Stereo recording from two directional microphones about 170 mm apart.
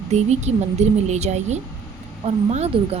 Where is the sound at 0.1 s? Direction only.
40° right (ahead or behind).